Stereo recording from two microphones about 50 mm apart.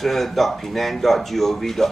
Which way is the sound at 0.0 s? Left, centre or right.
Centre.